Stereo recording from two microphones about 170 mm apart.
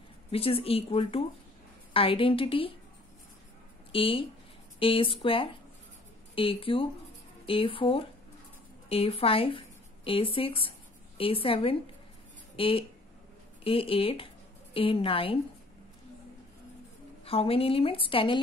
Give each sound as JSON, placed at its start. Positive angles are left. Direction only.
{"t": 0.3, "sound": "a woman's voice", "side_deg": 35}
{"t": 3.9, "sound": "a woman's voice", "side_deg": 30}
{"t": 17.2, "sound": "a woman's voice", "side_deg": 35}